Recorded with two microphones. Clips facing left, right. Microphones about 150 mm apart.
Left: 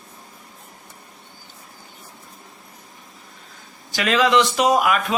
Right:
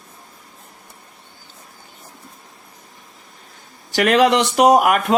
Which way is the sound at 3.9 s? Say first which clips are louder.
Right 3 dB; 65° right (ahead or behind).